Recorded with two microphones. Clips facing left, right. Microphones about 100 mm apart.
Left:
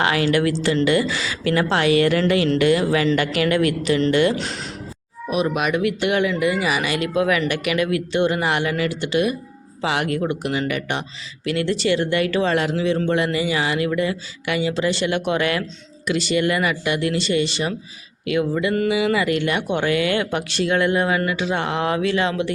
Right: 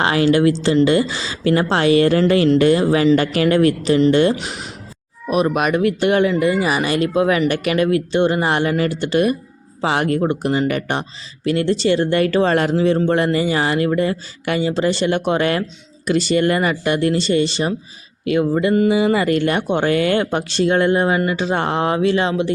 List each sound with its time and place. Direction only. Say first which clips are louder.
0.0 s a woman's voice: right 4 dB; 30° right (ahead or behind)
4.4 s speech: left 1 dB; 15° right (ahead or behind)
5.3 s speech: right 4 dB; 45° right (ahead or behind); by 22.5 s 25° right (ahead or behind)